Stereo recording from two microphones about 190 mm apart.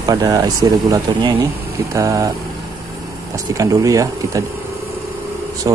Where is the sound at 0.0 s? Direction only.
20° right (ahead or behind).